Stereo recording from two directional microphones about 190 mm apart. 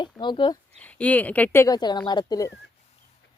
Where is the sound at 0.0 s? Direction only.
25° left (ahead or behind).